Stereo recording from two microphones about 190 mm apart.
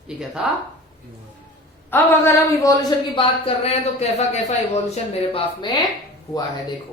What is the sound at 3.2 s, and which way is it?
Speech, 30° left (ahead or behind).